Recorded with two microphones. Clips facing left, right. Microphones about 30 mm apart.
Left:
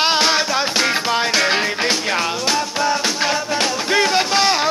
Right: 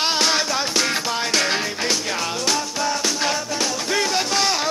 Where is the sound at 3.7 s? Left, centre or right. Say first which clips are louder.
Left 5 dB; left.